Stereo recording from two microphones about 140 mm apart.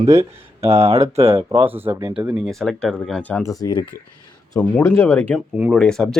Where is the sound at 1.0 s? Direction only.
45° right (ahead or behind).